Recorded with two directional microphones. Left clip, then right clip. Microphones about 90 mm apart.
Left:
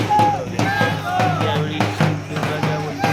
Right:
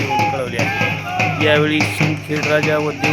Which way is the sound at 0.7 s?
5° right (ahead or behind).